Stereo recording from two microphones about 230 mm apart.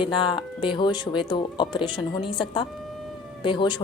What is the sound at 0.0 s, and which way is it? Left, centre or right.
Speech, left.